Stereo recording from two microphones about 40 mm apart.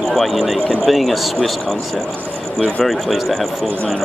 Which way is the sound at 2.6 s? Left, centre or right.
Centre.